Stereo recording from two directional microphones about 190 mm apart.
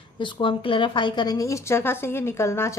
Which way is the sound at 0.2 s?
25° left (ahead or behind).